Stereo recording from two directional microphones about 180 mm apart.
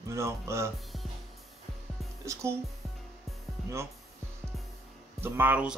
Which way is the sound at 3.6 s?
Centre (ahead or behind).